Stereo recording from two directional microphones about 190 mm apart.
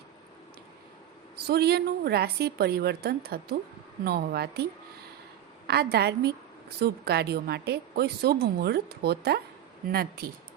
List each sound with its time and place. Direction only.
1.5 s a woman's voice: 55° right (ahead or behind)
5.6 s a woman's voice: 60° right (ahead or behind)